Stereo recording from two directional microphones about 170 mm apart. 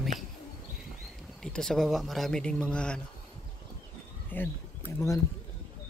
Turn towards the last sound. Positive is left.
turn(degrees=15)  # may be behind; listen again after turning